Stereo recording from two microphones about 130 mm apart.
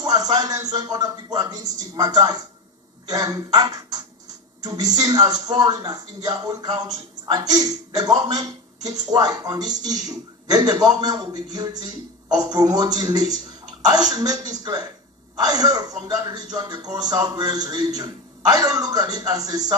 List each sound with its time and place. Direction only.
0.0 s a man's voice: 30° right (ahead or behind)